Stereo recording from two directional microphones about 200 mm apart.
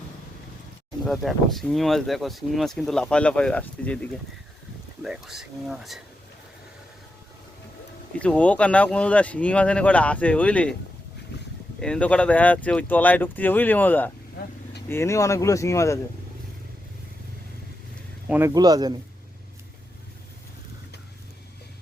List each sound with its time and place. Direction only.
1.0 s speech: centre (ahead or behind)
8.2 s speech: 5° left (ahead or behind)
11.8 s speech: 5° left (ahead or behind)
18.3 s speech: 10° right (ahead or behind)